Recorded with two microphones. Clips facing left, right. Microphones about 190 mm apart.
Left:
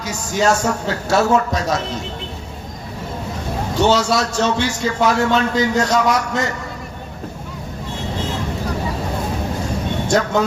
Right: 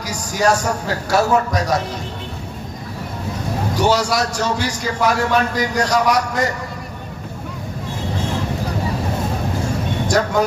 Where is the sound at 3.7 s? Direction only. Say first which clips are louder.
Left 2 dB; 25° left (ahead or behind).